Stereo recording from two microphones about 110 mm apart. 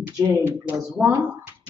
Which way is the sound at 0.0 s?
20° right (ahead or behind).